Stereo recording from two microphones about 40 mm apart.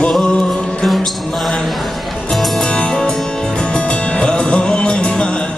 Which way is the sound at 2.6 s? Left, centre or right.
Left.